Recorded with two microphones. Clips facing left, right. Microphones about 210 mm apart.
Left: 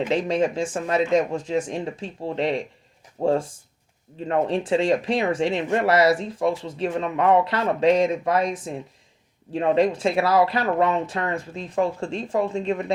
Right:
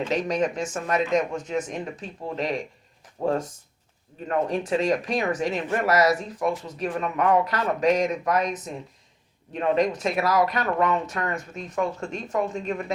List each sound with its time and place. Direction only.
0.1 s speech: 30° left (ahead or behind)